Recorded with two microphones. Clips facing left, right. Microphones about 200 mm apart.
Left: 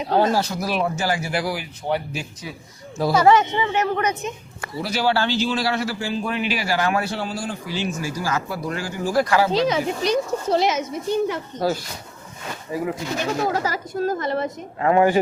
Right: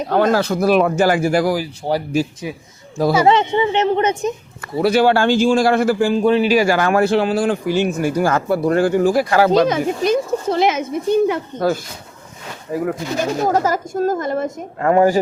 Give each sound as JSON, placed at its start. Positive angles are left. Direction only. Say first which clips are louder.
{"t": 0.0, "sound": "speech", "louder": "right 4 dB", "side_deg": -50}
{"t": 3.5, "sound": "speech", "louder": "right 6 dB", "side_deg": -25}
{"t": 4.8, "sound": "speech", "louder": "right 8 dB", "side_deg": -55}
{"t": 6.2, "sound": "speech", "louder": "right 13 dB", "side_deg": -35}
{"t": 7.1, "sound": "a man's voice", "louder": "right 11 dB", "side_deg": -75}